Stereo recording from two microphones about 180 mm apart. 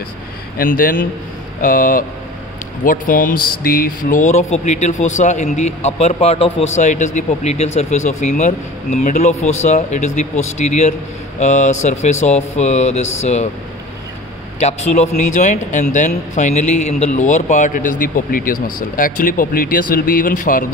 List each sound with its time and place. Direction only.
0.6 s speech: 50° left (ahead or behind)
14.6 s speech: 40° left (ahead or behind)